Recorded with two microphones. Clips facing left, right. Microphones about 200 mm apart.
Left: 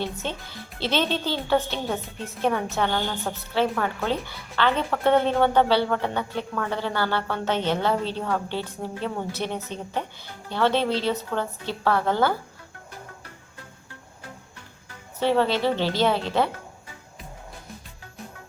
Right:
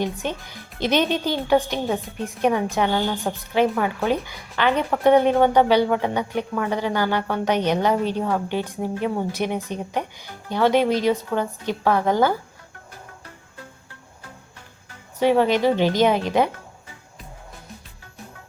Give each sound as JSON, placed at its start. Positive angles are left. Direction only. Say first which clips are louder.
{"t": 0.0, "sound": "a woman's voice", "louder": "right 4 dB", "side_deg": -15}
{"t": 15.2, "sound": "a woman's voice", "louder": "right 4 dB", "side_deg": -15}